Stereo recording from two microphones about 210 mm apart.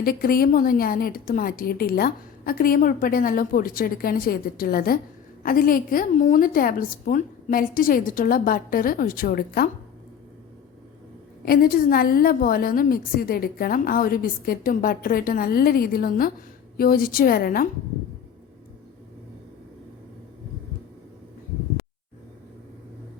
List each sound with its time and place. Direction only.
0.0 s a woman's voice: 45° left (ahead or behind)
11.4 s a woman's voice: 45° left (ahead or behind)